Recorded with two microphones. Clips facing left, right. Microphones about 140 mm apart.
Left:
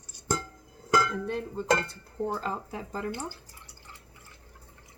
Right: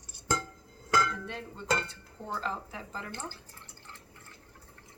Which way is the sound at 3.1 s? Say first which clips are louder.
Left 6 dB; 10° left (ahead or behind).